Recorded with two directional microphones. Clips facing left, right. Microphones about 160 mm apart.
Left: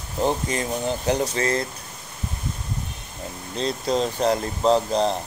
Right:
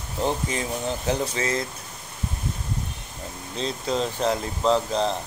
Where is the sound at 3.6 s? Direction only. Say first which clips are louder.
Left 3 dB; 35° left (ahead or behind).